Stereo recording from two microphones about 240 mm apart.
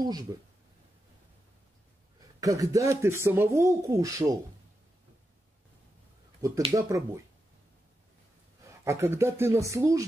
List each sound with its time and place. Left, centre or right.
0.0 s speech: centre
2.4 s speech: centre
6.4 s speech: centre
8.8 s speech: centre